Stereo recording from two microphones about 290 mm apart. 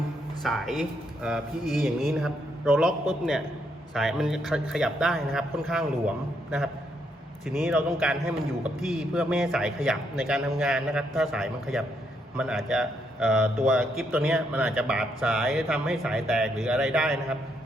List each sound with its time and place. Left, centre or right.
0.4 s a man's voice: centre
7.4 s a man's voice: centre